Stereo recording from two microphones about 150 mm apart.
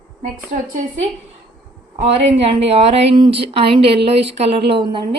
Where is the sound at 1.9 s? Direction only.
45° right (ahead or behind).